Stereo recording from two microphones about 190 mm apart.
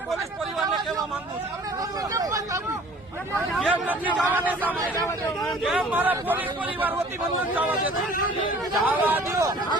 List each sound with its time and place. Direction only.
2.1 s a sound: 20° right (ahead or behind)
3.5 s a man's voice: 5° right (ahead or behind)
4.9 s a man's voice: 15° left (ahead or behind)
5.5 s a man's voice: centre (ahead or behind)